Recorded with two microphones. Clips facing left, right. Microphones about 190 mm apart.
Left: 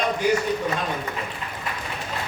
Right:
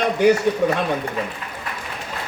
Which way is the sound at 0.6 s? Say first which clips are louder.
Right 7 dB; 70° right (ahead or behind).